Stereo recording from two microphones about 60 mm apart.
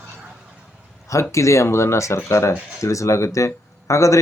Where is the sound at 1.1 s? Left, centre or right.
Left.